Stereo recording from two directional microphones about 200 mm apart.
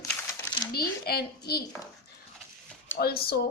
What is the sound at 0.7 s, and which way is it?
Speech, 50° left (ahead or behind).